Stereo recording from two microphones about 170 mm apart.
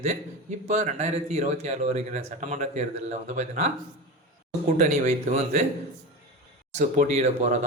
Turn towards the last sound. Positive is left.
turn(degrees=-45)  # may be behind; listen again after turning